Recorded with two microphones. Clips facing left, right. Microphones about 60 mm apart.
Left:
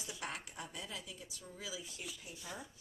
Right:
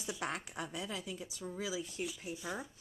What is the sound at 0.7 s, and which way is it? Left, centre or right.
Speech, right.